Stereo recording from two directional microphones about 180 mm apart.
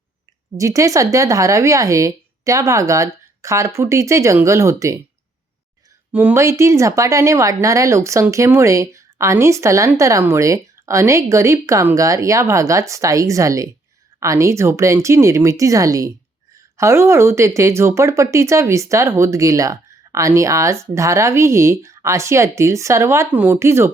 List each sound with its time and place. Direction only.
0.5 s a woman's voice: 20° right (ahead or behind)
6.1 s a woman's voice: 10° right (ahead or behind)